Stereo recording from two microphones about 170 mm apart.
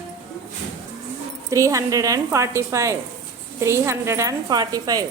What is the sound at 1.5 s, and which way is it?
Speech, 20° right (ahead or behind).